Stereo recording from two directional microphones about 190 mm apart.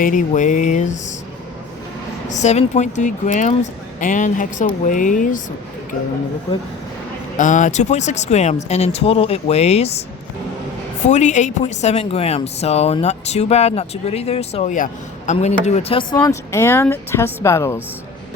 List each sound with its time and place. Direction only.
0.0 s a woman's voice: 45° left (ahead or behind)
2.3 s a woman's voice: 35° left (ahead or behind)
7.3 s a woman's voice: 40° left (ahead or behind)
11.0 s a woman's voice: 40° left (ahead or behind)
16.2 s speech: 15° left (ahead or behind)